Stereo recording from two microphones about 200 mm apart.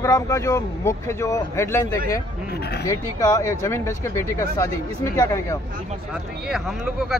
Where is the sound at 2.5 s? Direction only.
55° left (ahead or behind).